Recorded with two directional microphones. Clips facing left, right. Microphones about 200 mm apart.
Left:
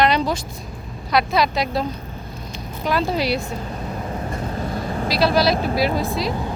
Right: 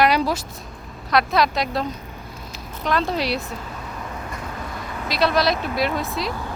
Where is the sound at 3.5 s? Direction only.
35° left (ahead or behind).